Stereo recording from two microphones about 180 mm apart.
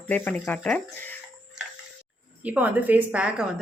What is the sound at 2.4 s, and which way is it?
A woman's voice, 10° right (ahead or behind).